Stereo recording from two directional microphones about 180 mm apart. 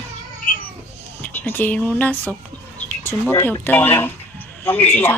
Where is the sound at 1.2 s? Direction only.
10° left (ahead or behind).